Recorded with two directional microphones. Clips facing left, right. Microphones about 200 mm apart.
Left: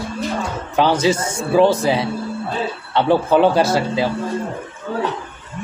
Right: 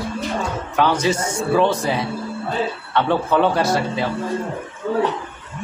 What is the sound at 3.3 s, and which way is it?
Speech, 25° left (ahead or behind).